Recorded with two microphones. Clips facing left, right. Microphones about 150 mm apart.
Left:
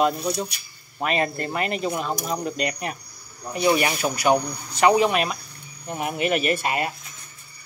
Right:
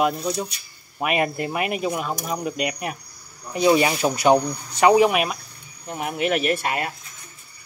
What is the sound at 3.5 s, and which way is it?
Speech, 15° right (ahead or behind).